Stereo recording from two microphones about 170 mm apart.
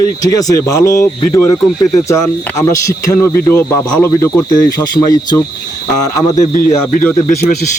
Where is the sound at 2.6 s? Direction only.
20° left (ahead or behind).